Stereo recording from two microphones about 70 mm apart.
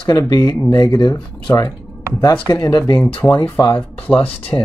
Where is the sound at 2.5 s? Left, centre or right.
Left.